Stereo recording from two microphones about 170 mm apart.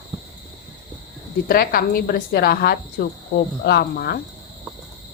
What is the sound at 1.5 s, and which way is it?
A woman's voice, 60° left (ahead or behind).